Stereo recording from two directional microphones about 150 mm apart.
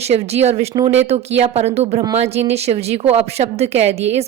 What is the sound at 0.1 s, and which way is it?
A woman's voice, 45° right (ahead or behind).